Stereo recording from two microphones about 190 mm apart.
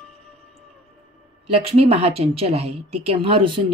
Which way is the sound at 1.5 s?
30° right (ahead or behind).